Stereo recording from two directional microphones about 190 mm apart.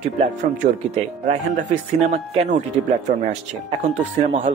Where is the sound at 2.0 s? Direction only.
35° right (ahead or behind).